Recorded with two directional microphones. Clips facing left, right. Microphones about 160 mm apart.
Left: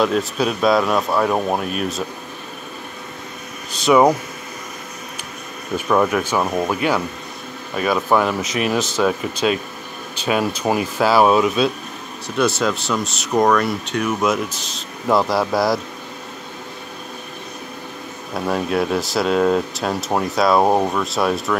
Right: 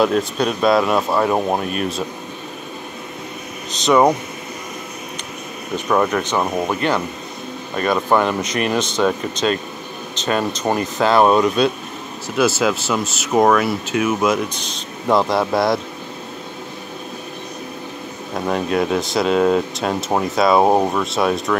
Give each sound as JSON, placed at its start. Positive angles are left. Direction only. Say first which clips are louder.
{"t": 0.0, "sound": "speech", "louder": "right 1 dB", "side_deg": 0}
{"t": 3.7, "sound": "speech", "louder": "left 1 dB", "side_deg": 5}
{"t": 5.8, "sound": "speech", "louder": "even", "side_deg": 0}
{"t": 18.5, "sound": "speech", "louder": "right 1 dB", "side_deg": 0}